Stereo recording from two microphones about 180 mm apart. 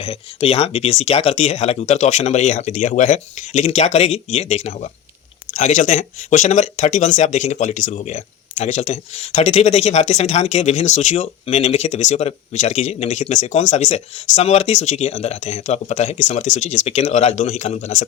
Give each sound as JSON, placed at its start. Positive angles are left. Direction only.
{"t": 0.0, "sound": "speech", "side_deg": 35}